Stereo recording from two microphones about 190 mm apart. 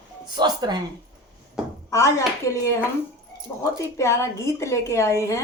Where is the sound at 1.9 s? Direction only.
15° left (ahead or behind).